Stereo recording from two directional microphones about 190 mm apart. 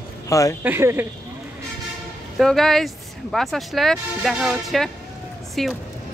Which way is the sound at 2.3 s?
Centre (ahead or behind).